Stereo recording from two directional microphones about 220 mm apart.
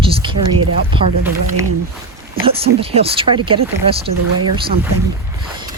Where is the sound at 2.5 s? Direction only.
25° right (ahead or behind).